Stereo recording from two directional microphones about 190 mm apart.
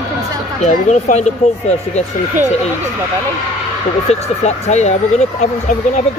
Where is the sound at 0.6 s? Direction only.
40° left (ahead or behind).